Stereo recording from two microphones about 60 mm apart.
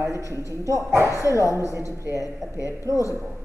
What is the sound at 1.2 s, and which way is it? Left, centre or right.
A man's voice, right.